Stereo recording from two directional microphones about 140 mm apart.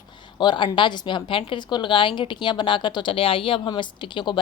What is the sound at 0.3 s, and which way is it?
A woman's voice, 35° left (ahead or behind).